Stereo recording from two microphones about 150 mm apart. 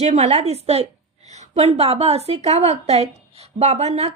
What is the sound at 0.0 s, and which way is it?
A woman's voice, 45° right (ahead or behind).